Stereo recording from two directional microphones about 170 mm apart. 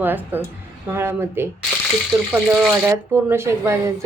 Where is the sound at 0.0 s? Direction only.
10° right (ahead or behind).